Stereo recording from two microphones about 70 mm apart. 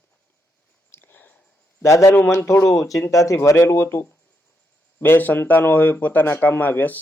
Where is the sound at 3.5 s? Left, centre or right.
Left.